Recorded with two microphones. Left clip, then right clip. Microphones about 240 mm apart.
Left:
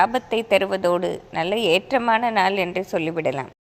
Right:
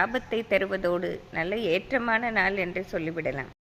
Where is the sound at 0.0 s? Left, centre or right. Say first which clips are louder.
Left 7 dB; centre.